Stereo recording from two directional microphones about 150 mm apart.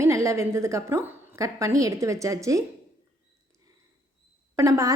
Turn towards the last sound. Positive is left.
turn(degrees=-20)  # may be behind; listen again after turning